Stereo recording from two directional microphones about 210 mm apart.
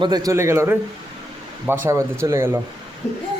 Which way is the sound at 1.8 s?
15° right (ahead or behind).